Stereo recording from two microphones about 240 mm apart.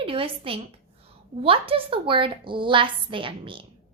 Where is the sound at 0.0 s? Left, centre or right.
Right.